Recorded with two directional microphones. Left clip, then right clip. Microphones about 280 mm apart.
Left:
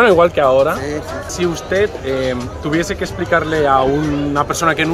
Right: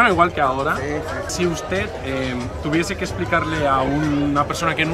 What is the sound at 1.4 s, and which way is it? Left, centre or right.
Speech, centre.